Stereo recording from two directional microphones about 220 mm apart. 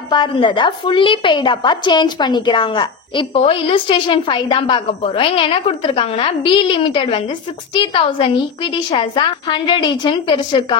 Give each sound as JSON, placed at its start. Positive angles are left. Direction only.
{"t": 0.1, "sound": "a woman's voice", "side_deg": 20}